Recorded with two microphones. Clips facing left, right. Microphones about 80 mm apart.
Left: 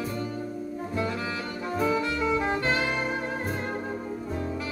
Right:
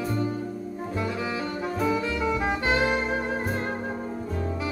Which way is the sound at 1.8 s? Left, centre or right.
Centre.